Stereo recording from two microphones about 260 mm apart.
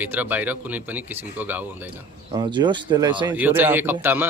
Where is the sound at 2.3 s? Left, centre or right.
Centre.